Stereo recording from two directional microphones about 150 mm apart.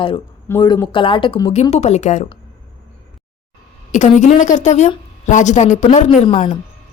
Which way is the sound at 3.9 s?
55° left (ahead or behind).